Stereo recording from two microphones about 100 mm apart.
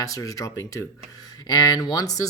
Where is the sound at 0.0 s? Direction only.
35° left (ahead or behind).